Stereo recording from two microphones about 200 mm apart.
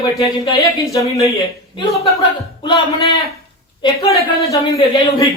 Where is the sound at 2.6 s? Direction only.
20° left (ahead or behind).